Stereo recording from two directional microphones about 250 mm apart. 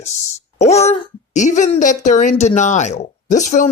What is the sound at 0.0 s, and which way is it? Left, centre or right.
Speech, left.